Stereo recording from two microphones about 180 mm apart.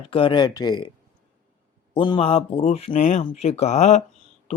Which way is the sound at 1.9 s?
25° left (ahead or behind).